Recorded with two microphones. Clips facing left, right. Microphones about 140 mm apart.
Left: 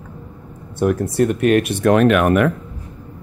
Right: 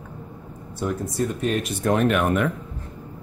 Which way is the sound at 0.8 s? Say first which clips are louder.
Left 8 dB; 65° left (ahead or behind).